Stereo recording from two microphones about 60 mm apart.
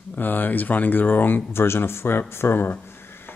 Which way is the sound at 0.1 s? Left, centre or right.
Left.